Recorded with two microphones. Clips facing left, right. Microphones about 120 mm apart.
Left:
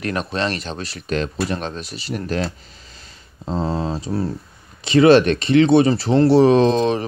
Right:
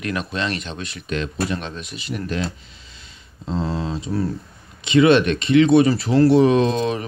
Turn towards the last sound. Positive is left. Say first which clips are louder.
# left 3 dB
turn(degrees=30)  # may be behind; listen again after turning